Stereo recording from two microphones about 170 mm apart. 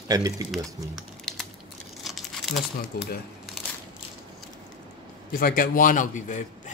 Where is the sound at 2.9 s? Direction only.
65° left (ahead or behind).